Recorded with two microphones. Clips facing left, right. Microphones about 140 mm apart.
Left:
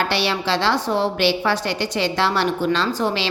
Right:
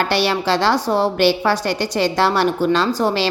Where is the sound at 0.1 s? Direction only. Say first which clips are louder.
Right 4 dB; 45° right (ahead or behind).